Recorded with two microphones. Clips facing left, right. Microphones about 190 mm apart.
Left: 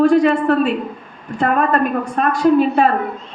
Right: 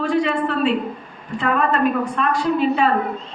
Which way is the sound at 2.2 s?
45° left (ahead or behind).